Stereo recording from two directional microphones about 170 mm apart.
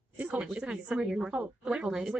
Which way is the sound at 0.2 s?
10° right (ahead or behind).